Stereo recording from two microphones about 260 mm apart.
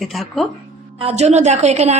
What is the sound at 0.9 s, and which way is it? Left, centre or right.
Speech, right.